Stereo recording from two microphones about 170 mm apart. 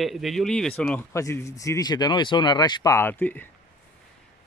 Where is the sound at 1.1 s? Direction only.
15° left (ahead or behind).